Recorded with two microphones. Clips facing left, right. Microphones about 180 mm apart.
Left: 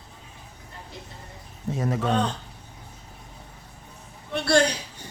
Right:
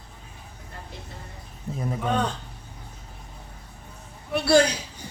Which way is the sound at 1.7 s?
80° left.